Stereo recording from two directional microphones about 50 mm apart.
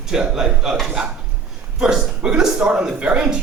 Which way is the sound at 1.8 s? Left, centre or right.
Centre.